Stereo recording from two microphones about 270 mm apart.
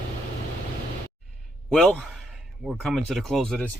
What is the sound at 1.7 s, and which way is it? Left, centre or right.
A man's voice, centre.